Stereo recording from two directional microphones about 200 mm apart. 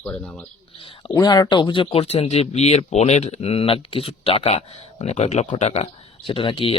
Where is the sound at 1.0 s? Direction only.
20° left (ahead or behind).